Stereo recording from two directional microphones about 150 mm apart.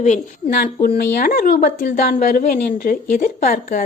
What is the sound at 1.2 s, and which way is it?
A woman's voice, 70° left (ahead or behind).